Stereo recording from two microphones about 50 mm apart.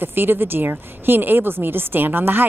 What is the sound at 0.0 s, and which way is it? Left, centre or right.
A woman's voice, right.